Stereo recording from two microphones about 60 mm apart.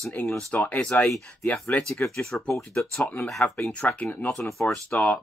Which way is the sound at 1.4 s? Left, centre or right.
Centre.